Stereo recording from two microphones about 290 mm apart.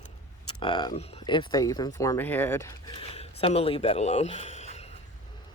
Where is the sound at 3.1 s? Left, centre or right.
Left.